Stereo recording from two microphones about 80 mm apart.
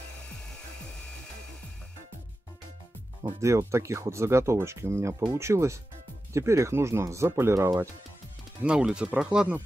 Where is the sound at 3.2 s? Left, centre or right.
Right.